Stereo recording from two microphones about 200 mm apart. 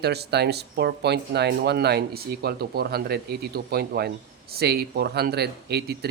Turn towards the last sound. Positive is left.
turn(degrees=-55)  # may be behind; listen again after turning